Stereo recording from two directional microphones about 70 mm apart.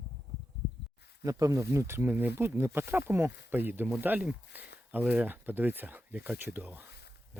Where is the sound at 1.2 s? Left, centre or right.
Right.